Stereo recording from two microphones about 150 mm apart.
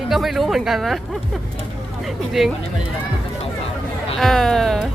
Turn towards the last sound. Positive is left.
turn(degrees=0)  # may be behind; listen again after turning